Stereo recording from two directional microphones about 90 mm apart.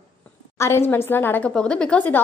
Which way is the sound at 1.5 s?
10° left (ahead or behind).